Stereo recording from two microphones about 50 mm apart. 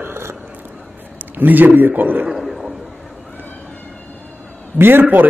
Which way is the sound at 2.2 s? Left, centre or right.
Centre.